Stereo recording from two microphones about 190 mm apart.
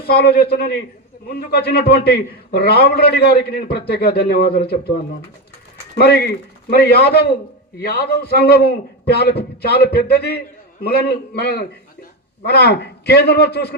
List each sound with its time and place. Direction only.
0.0 s a man's voice: 55° left (ahead or behind)
6.0 s a man's voice: 55° left (ahead or behind)